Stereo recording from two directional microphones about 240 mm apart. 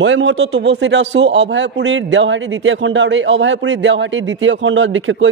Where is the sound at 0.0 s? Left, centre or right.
Right.